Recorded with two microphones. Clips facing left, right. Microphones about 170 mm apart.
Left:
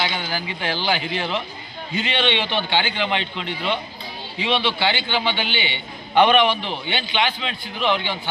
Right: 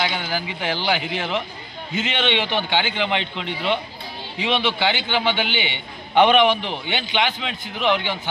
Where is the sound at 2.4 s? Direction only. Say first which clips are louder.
Even; 15° right (ahead or behind).